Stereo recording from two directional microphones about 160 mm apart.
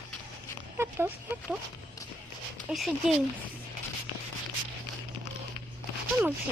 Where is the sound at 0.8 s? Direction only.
15° right (ahead or behind).